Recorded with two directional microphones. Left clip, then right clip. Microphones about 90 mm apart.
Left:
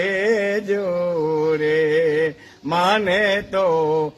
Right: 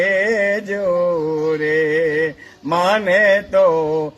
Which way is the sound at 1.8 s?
15° left (ahead or behind).